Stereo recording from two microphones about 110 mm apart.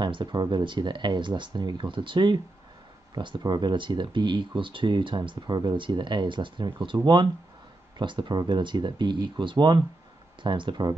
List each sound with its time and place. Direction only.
0.0 s speech: 45° right (ahead or behind)
8.0 s speech: 45° right (ahead or behind)